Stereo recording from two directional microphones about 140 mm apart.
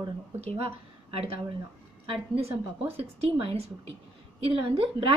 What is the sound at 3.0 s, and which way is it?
A woman's voice, 45° right (ahead or behind).